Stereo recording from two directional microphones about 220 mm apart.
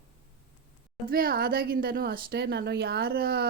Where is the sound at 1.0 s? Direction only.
40° right (ahead or behind).